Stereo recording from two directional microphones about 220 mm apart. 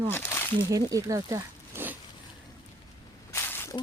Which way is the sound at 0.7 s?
15° right (ahead or behind).